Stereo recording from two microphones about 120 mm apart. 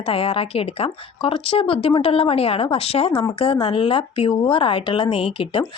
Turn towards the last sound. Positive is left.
turn(degrees=50)  # may be behind; listen again after turning